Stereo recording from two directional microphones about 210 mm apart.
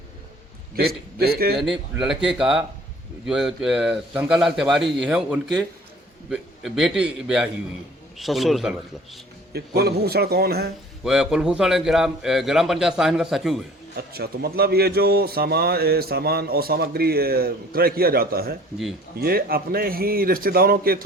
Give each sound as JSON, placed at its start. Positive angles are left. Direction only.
{"t": 0.8, "sound": "a man's voice", "side_deg": -45}
{"t": 1.5, "sound": "a man's voice", "side_deg": 0}
{"t": 9.5, "sound": "a man's voice", "side_deg": -50}
{"t": 11.0, "sound": "a man's voice", "side_deg": 0}
{"t": 13.9, "sound": "a man's voice", "side_deg": -45}